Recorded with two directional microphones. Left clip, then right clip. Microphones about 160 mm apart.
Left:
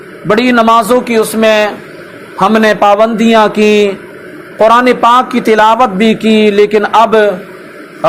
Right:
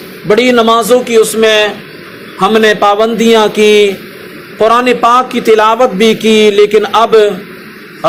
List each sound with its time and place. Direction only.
0.3 s a man's voice: 45° left (ahead or behind)